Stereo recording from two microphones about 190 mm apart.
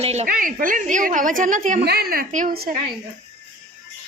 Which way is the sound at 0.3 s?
45° right (ahead or behind).